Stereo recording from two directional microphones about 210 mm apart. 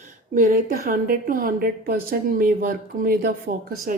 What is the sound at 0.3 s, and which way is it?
A woman's voice, 40° right (ahead or behind).